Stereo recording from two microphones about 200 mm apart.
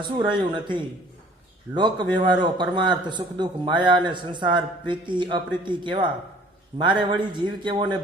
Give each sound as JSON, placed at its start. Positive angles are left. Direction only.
{"t": 0.0, "sound": "a man's voice", "side_deg": -25}